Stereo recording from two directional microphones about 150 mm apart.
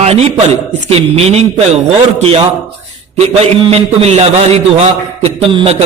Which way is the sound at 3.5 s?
40° right (ahead or behind).